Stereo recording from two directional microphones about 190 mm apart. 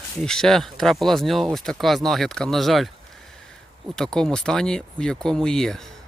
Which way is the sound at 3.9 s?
5° left (ahead or behind).